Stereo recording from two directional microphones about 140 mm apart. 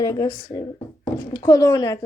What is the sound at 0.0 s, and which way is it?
A woman's voice, 25° left (ahead or behind).